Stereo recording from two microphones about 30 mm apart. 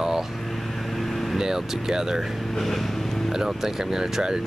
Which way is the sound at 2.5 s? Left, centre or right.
Centre.